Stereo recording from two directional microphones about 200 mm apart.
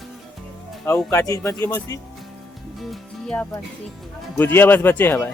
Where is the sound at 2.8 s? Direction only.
Centre (ahead or behind).